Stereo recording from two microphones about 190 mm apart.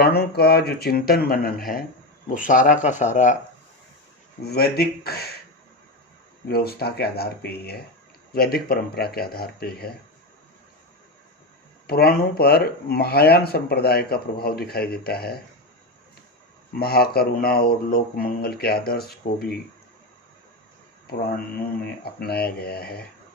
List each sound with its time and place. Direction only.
0.0 s speech: 55° left (ahead or behind); by 3.3 s 40° left (ahead or behind)
4.4 s speech: 55° left (ahead or behind)
6.5 s speech: 55° left (ahead or behind)
11.9 s speech: 55° left (ahead or behind)
16.7 s speech: 55° left (ahead or behind)
21.1 s speech: 55° left (ahead or behind)